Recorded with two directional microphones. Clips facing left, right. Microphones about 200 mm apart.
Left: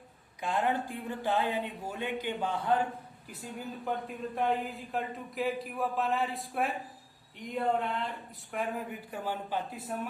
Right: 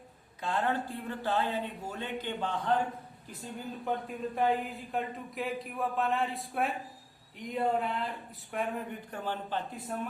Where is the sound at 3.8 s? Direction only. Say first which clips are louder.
Right 2 dB; centre (ahead or behind).